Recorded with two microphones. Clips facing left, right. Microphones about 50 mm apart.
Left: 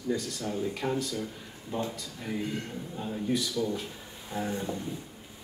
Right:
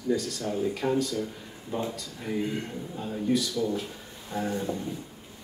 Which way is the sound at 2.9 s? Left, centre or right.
Centre.